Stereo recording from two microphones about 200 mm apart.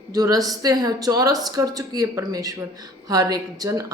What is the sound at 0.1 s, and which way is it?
Speech, 20° right (ahead or behind).